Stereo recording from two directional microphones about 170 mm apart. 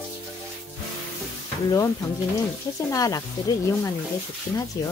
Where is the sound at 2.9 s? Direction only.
20° left (ahead or behind).